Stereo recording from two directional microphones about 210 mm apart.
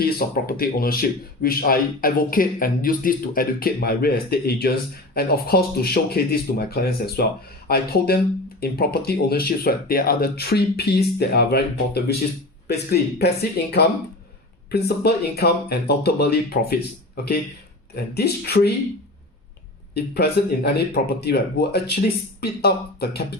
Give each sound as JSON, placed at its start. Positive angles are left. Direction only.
{"t": 0.0, "sound": "speech", "side_deg": 45}
{"t": 18.1, "sound": "speech", "side_deg": 50}
{"t": 19.9, "sound": "speech", "side_deg": 50}